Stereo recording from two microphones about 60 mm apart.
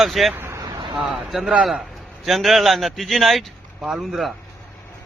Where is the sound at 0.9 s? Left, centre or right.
Centre.